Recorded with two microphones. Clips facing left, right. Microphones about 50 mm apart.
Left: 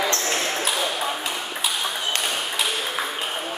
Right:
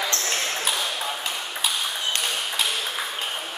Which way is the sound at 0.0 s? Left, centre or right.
Centre.